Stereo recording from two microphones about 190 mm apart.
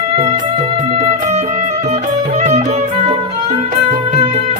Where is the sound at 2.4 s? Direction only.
40° right (ahead or behind).